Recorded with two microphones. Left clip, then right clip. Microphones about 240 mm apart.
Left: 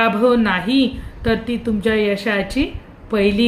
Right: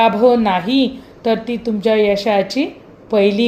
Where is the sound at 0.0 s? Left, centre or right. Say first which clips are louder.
Right 3 dB; centre.